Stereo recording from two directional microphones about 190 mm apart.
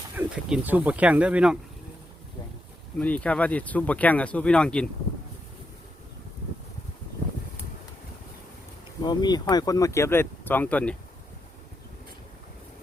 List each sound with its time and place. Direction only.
0.2 s speech: 5° right (ahead or behind)
3.0 s speech: 5° left (ahead or behind)
9.0 s speech: 20° left (ahead or behind)